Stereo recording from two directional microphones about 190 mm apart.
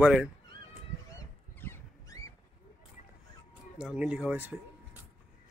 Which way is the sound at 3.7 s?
5° right (ahead or behind).